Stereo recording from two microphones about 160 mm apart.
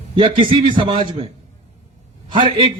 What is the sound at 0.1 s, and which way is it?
A man's voice, 30° right (ahead or behind).